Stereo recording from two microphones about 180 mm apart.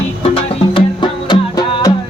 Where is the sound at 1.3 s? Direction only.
20° left (ahead or behind).